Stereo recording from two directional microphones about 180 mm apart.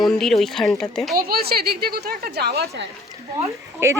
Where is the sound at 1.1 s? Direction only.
60° right (ahead or behind).